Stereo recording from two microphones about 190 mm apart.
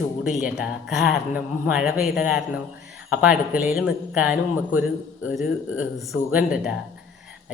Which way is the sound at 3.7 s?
5° right (ahead or behind).